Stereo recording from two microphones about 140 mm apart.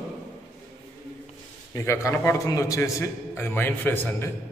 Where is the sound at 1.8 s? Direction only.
20° left (ahead or behind).